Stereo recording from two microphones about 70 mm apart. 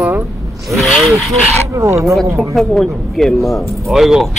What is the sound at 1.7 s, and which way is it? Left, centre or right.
Speech, right.